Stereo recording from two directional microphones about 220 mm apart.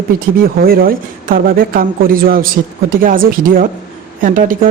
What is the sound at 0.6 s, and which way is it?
A man's voice, 40° right (ahead or behind).